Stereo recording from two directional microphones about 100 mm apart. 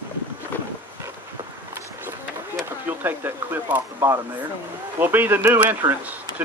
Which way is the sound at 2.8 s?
20° right (ahead or behind).